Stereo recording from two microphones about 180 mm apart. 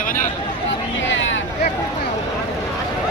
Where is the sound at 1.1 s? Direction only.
90° left.